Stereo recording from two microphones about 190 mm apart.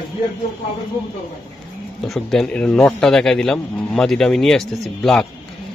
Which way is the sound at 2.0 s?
Centre (ahead or behind).